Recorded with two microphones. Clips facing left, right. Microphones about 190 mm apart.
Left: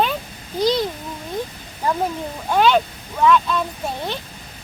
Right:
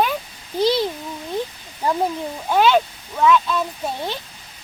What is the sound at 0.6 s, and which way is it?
Speech, 15° left (ahead or behind).